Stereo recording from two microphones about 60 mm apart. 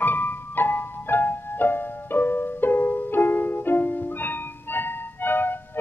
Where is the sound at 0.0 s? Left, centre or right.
Left.